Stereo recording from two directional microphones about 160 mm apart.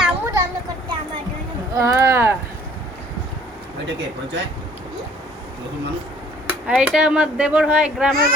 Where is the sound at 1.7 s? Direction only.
15° right (ahead or behind).